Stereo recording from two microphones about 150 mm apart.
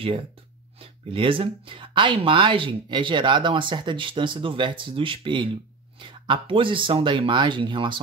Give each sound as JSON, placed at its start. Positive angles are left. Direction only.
{"t": 0.7, "sound": "speech", "side_deg": -35}